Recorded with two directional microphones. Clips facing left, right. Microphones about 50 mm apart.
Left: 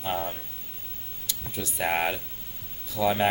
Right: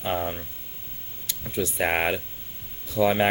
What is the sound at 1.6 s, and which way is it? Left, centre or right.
Speech, right.